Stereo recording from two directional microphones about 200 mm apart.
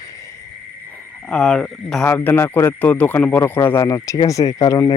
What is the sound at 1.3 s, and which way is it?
Speech, 5° left (ahead or behind).